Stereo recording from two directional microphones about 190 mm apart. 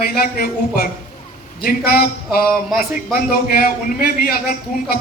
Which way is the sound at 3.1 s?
50° left (ahead or behind).